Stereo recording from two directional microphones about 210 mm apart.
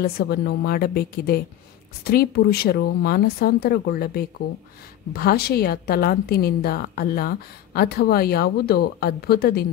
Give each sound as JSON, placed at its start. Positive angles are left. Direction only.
{"t": 0.0, "sound": "a woman's voice", "side_deg": 45}